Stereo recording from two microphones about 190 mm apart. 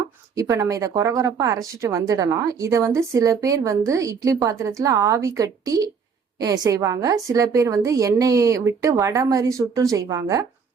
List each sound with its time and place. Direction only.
0.3 s speech: 15° right (ahead or behind)